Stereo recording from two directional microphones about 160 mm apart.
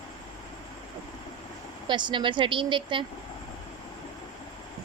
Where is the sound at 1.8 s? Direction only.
30° right (ahead or behind).